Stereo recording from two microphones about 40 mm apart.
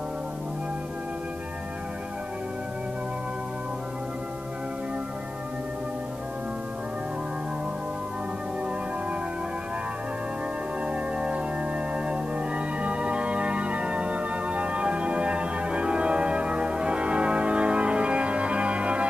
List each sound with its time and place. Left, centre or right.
10.9 s organ: right